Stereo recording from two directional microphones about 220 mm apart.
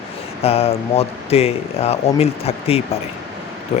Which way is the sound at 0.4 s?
25° left (ahead or behind).